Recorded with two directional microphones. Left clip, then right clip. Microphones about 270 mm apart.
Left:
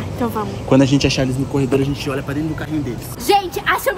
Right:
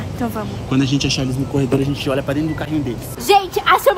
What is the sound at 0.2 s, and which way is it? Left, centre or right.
A woman's voice, centre.